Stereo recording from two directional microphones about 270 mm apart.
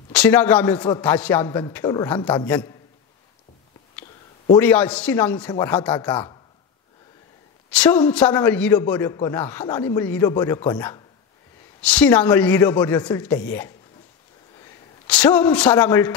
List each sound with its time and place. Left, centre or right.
0.1 s a man's voice: centre
4.6 s speech: centre
5.9 s a man's voice: centre
7.7 s a man's voice: centre